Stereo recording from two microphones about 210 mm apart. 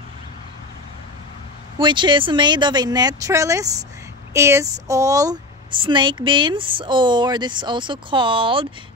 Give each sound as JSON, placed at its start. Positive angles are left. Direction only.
{"t": 1.8, "sound": "a woman's voice", "side_deg": -20}